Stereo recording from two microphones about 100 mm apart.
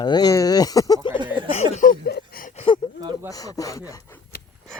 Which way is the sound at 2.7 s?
60° left (ahead or behind).